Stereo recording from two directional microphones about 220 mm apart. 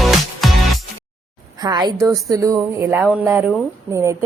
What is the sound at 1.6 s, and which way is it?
A woman's voice, 20° right (ahead or behind).